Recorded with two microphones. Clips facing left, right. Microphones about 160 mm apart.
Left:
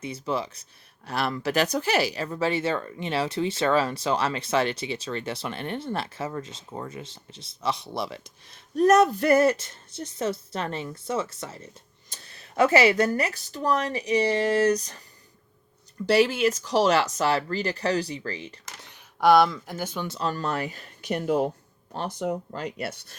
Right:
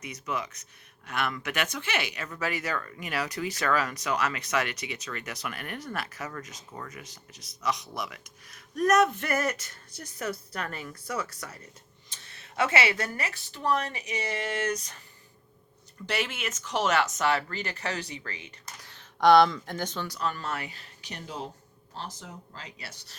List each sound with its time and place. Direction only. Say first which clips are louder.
0.0 s speech: left 5 dB; 30° left (ahead or behind)
12.0 s speech: left 2 dB; 40° left (ahead or behind)
16.0 s speech: left 12 dB; 35° left (ahead or behind)
18.8 s a sound: left 3 dB; 15° left (ahead or behind)
19.2 s speech: left 1 dB; 5° left (ahead or behind)
20.1 s speech: left 4 dB; 30° left (ahead or behind); by 23.1 s 60° left (ahead or behind)